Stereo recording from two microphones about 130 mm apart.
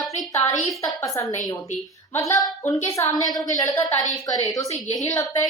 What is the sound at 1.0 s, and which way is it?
Speech, 25° left (ahead or behind).